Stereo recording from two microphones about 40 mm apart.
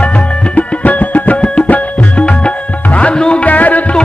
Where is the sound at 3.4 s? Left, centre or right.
Left.